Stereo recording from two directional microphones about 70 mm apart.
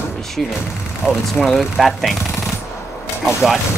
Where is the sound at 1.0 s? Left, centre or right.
Centre.